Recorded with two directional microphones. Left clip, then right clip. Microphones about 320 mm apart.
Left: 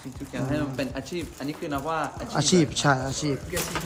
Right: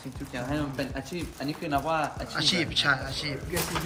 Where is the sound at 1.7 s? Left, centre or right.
Centre.